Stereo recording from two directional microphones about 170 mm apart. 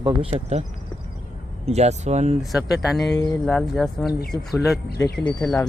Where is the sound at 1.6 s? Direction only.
40° right (ahead or behind).